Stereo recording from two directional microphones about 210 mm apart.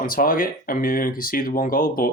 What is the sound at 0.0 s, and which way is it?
Speech, 45° left (ahead or behind).